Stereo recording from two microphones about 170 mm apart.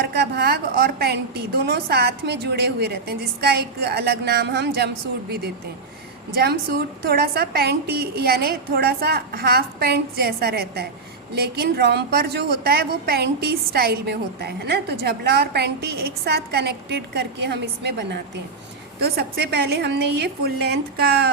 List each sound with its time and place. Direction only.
0.0 s a woman's voice: 70° right (ahead or behind)
6.3 s a woman's voice: 70° right (ahead or behind); by 18.2 s 85° right
18.9 s a woman's voice: 65° right (ahead or behind)